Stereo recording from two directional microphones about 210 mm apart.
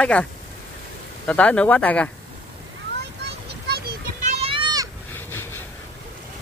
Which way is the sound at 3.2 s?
50° right (ahead or behind).